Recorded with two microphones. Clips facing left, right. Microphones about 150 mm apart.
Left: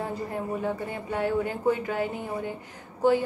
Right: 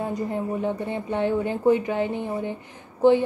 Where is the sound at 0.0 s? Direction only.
20° right (ahead or behind).